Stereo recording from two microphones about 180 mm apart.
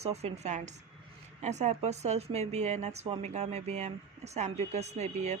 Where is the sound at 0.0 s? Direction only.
35° right (ahead or behind).